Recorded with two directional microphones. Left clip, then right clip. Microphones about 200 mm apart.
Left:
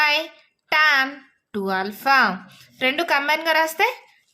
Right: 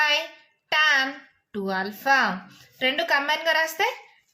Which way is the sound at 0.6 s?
35° left (ahead or behind).